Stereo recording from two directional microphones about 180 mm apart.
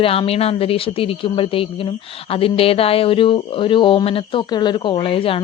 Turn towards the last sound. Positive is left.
turn(degrees=30)  # may be behind; listen again after turning